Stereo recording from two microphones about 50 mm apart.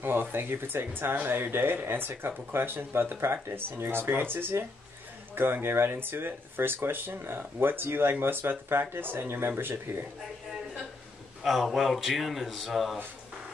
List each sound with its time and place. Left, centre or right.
0.0 s speech: right
11.4 s a man's voice: centre